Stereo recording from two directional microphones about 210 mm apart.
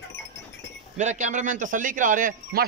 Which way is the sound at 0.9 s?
35° right (ahead or behind).